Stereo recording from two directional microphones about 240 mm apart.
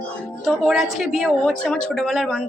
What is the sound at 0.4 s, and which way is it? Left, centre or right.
A woman's voice, centre.